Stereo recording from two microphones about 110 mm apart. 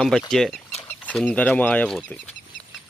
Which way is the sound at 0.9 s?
15° left (ahead or behind).